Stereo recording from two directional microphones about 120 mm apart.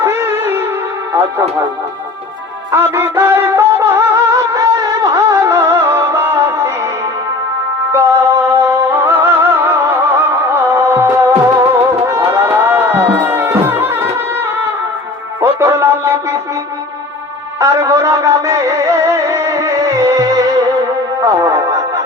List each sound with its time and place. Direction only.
0.0 s music: 20° right (ahead or behind)
1.1 s speech: 20° right (ahead or behind)
2.7 s music: 20° right (ahead or behind)
7.9 s music: 20° right (ahead or behind)
17.6 s music: 30° right (ahead or behind)